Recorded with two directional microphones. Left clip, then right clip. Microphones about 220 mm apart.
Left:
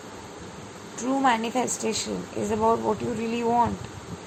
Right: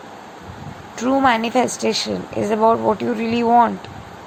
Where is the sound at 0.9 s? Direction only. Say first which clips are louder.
Right 7 dB; 25° right (ahead or behind).